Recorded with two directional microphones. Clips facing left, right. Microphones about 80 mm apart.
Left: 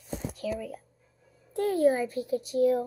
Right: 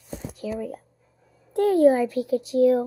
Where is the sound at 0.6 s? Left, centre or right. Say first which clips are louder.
Right 6 dB; right.